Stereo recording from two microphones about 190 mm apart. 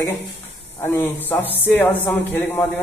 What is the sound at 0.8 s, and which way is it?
A man's voice, 10° left (ahead or behind).